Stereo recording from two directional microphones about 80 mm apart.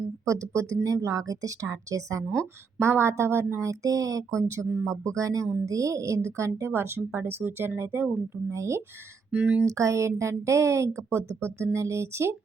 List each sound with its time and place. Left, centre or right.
0.3 s a woman's voice: right
2.7 s a woman's voice: right
9.3 s speech: centre
9.6 s a woman's voice: right